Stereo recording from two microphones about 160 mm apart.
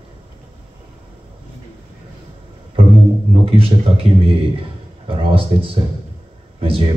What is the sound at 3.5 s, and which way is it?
Speech, 35° right (ahead or behind).